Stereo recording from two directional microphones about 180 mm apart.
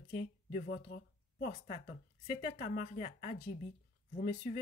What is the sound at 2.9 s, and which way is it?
Speech, 45° left (ahead or behind).